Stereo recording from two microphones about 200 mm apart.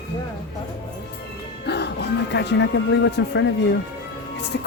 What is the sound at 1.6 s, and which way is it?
Speech, 55° left (ahead or behind).